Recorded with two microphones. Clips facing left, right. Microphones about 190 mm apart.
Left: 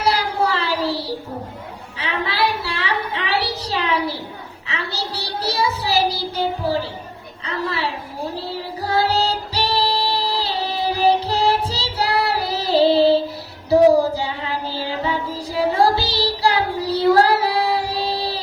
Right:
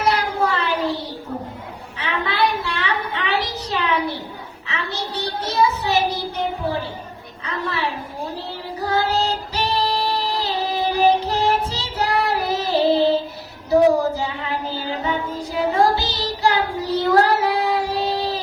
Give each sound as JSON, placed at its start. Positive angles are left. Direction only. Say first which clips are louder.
{"t": 0.0, "sound": "a sound", "louder": "even", "side_deg": 35}
{"t": 4.7, "sound": "child singing", "louder": "even", "side_deg": 35}
{"t": 8.4, "sound": "music", "louder": "left 1 dB", "side_deg": 35}
{"t": 13.7, "sound": "a sound", "louder": "left 2 dB", "side_deg": 35}
{"t": 14.7, "sound": "music", "louder": "left 2 dB", "side_deg": 35}
{"t": 18.1, "sound": "child singing", "louder": "right 1 dB", "side_deg": 35}